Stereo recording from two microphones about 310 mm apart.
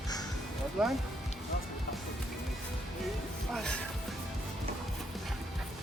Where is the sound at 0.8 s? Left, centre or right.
Centre.